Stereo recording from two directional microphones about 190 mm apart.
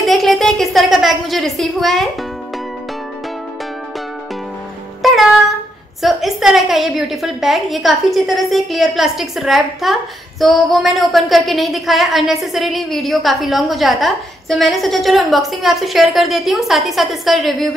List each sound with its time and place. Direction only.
0.0 s a sound: centre (ahead or behind)
5.0 s music: centre (ahead or behind)
6.0 s a woman's voice: centre (ahead or behind)